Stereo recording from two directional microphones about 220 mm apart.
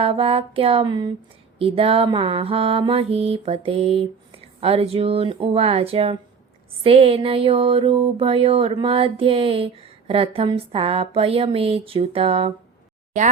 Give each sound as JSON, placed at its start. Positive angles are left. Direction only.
{"t": 0.0, "sound": "mantra", "side_deg": -25}